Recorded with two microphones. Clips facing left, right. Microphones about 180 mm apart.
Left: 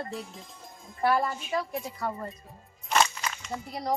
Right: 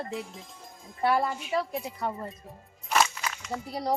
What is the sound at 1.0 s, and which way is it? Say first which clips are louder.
A woman's voice: even; 15° right (ahead or behind).